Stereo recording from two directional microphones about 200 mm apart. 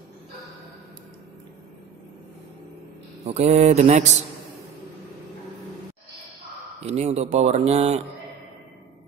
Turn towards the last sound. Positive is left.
turn(degrees=-30)  # may be behind; listen again after turning